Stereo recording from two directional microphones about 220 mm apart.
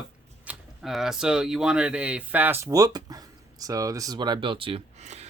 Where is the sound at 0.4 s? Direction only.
Centre (ahead or behind).